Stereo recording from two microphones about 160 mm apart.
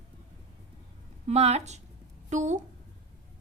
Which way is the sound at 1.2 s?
40° right (ahead or behind).